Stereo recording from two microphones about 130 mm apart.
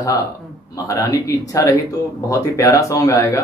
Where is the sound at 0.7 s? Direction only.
25° left (ahead or behind).